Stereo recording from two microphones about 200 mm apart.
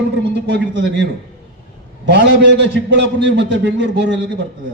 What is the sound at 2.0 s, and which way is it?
A man's voice, 60° right (ahead or behind).